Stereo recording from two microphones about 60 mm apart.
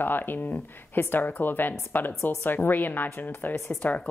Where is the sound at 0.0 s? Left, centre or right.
Left.